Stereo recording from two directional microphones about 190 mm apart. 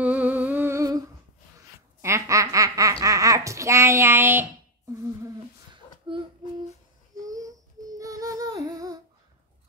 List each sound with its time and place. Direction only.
0.0 s humming: 10° right (ahead or behind)
2.0 s laughter: 15° right (ahead or behind)
7.2 s a sound: 20° right (ahead or behind)
8.0 s music: 20° right (ahead or behind)